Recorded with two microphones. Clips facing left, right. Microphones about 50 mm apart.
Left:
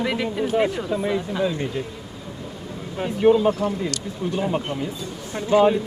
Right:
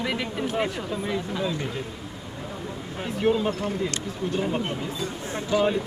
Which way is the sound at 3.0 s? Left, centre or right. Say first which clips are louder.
Left 7 dB; centre.